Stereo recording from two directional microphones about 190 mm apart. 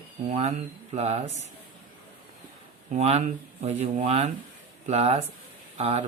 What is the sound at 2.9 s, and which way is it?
Speech, 35° right (ahead or behind).